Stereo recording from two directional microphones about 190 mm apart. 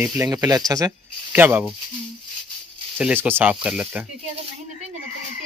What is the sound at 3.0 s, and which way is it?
Speech, 10° right (ahead or behind).